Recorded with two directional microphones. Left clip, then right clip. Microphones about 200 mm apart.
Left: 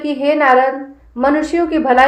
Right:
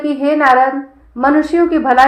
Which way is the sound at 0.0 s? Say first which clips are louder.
Right 1 dB; 25° right (ahead or behind).